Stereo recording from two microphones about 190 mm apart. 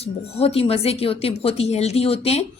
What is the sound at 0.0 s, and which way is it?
Speech, 30° left (ahead or behind).